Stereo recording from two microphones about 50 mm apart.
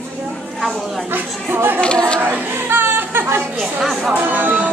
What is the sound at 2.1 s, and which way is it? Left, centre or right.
Chatter, right.